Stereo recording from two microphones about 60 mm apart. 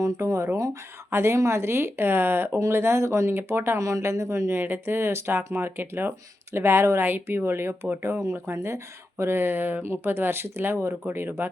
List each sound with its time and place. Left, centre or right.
0.0 s speech: right
2.7 s speech: right
3.8 s speech: right
4.5 s speech: right
5.5 s speech: right
8.1 s speech: right